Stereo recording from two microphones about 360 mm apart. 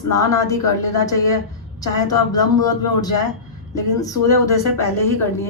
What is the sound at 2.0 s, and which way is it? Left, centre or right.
A woman's voice, centre.